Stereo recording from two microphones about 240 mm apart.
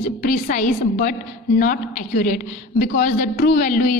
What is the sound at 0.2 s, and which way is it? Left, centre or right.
A woman's voice, left.